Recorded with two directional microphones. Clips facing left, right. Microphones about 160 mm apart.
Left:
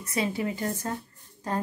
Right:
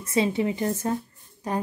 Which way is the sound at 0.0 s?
25° right (ahead or behind).